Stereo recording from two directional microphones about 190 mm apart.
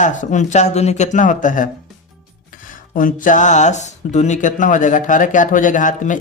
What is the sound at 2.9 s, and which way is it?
Speech, 45° left (ahead or behind).